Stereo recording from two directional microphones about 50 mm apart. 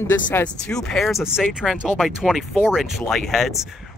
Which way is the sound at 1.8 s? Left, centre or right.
Centre.